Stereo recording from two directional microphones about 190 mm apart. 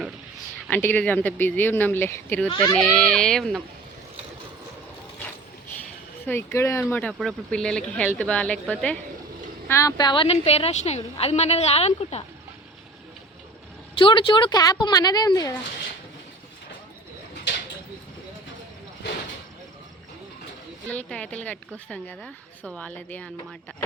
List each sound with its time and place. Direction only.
0.7 s speech: 10° left (ahead or behind)
6.2 s speech: 15° left (ahead or behind)
6.9 s a woman's voice: 5° left (ahead or behind); by 12.2 s 35° left (ahead or behind)
13.9 s speech: 25° left (ahead or behind)
20.9 s speech: 5° left (ahead or behind)